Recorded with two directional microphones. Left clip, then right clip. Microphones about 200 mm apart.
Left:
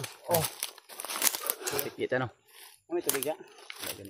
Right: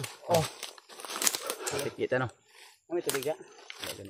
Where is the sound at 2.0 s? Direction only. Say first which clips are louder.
Right 1 dB; 5° left (ahead or behind).